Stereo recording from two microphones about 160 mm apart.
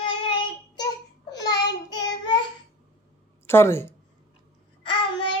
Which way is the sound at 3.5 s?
15° left (ahead or behind).